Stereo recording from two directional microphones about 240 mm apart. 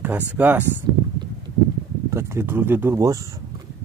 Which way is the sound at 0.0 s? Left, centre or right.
Centre.